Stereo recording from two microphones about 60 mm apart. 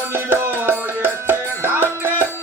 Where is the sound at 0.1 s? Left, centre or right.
Right.